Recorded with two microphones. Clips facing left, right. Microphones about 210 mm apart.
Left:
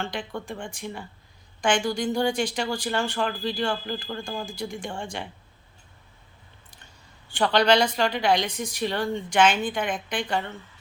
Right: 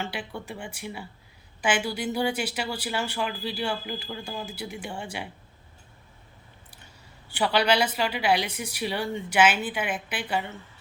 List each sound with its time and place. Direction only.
0.0 s a woman's voice: 5° right (ahead or behind)
6.7 s a woman's voice: 10° right (ahead or behind)